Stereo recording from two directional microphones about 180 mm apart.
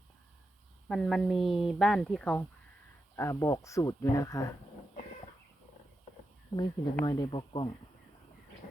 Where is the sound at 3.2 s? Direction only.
15° left (ahead or behind).